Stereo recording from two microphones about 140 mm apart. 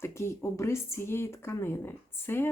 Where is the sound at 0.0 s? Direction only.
20° left (ahead or behind).